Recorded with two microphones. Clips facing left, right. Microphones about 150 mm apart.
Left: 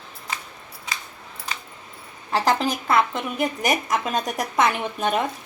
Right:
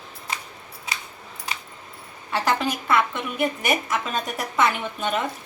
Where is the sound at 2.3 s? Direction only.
35° left (ahead or behind).